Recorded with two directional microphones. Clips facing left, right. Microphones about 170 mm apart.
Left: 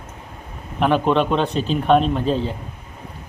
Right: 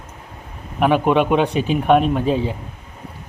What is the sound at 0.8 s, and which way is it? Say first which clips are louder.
A man's voice: right 2 dB; 10° right (ahead or behind).